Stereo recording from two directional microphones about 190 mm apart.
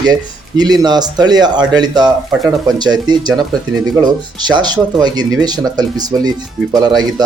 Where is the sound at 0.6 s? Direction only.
20° right (ahead or behind).